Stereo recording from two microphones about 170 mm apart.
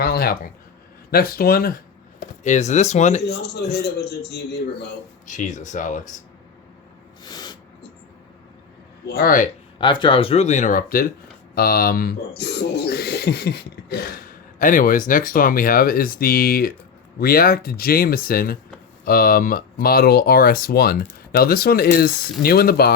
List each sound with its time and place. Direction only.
0.0 s speech: 65° left (ahead or behind)
2.4 s speech: 45° left (ahead or behind)
3.2 s a man's voice: 75° left (ahead or behind)
5.2 s speech: 45° left (ahead or behind)
7.3 s a sound: 25° left (ahead or behind)
9.0 s speech: 65° left (ahead or behind)
9.7 s speech: 25° left (ahead or behind); by 22.9 s 65° left (ahead or behind)